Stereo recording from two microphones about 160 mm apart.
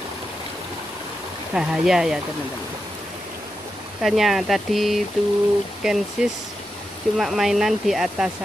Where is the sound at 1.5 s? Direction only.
5° right (ahead or behind).